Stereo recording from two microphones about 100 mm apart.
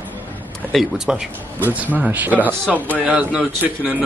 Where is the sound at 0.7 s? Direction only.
5° right (ahead or behind).